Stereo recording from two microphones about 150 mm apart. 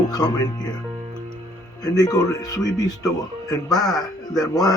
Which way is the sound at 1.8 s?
25° left (ahead or behind).